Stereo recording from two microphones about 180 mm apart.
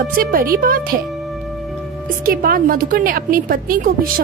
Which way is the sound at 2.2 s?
55° right (ahead or behind).